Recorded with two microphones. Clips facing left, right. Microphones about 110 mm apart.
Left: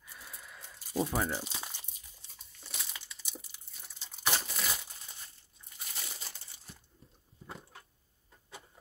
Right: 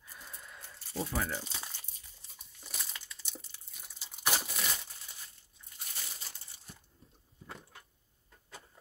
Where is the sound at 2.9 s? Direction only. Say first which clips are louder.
Even; 10° left (ahead or behind).